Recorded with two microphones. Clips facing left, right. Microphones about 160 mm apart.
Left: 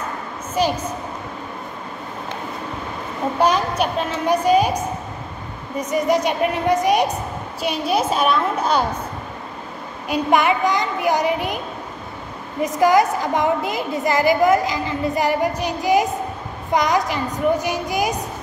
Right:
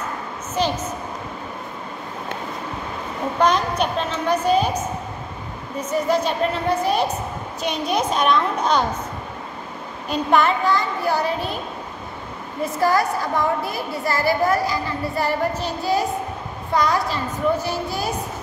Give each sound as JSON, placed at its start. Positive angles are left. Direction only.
{"t": 0.6, "sound": "a woman's voice", "side_deg": 10}
{"t": 3.3, "sound": "a woman's voice", "side_deg": 10}
{"t": 10.0, "sound": "a woman's voice", "side_deg": 10}
{"t": 12.6, "sound": "a woman's voice", "side_deg": 15}